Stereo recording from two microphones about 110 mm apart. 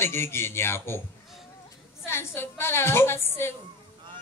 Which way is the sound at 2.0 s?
20° left (ahead or behind).